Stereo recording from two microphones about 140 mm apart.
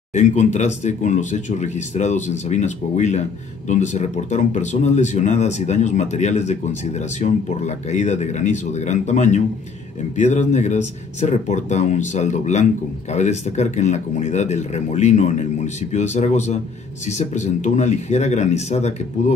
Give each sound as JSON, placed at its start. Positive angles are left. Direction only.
{"t": 0.1, "sound": "speech", "side_deg": 55}